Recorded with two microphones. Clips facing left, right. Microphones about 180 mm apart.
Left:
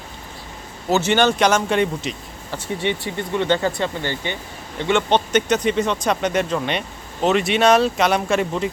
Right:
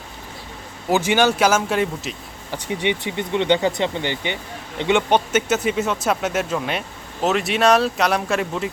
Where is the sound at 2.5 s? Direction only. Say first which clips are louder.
Right 1 dB; 15° right (ahead or behind).